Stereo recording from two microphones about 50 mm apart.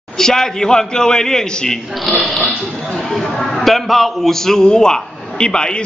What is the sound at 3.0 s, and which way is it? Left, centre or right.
A man's voice, centre.